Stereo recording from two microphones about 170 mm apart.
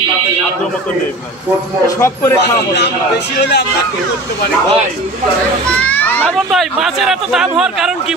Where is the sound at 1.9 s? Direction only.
15° left (ahead or behind).